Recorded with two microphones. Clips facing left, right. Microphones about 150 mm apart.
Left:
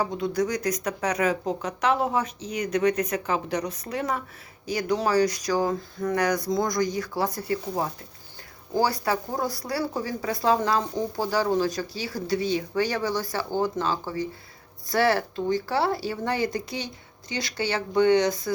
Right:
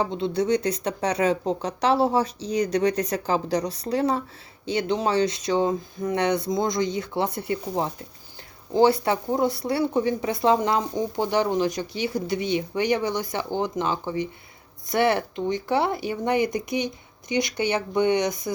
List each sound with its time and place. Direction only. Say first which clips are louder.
0.0 s speech: right 1 dB; 25° right (ahead or behind)